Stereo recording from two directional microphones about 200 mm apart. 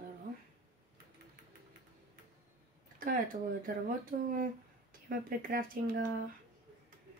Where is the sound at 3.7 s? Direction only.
45° right (ahead or behind).